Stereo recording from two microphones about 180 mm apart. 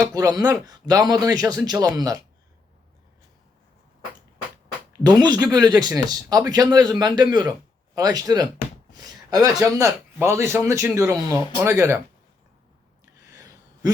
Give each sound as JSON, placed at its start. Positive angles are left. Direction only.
{"t": 0.1, "sound": "speech", "side_deg": -20}
{"t": 5.0, "sound": "a man's voice", "side_deg": -25}
{"t": 13.3, "sound": "a sound", "side_deg": -20}